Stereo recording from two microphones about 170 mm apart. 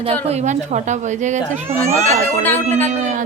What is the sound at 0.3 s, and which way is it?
A woman's voice, 40° right (ahead or behind).